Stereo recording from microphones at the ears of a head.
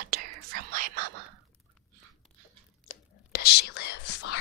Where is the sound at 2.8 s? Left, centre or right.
Left.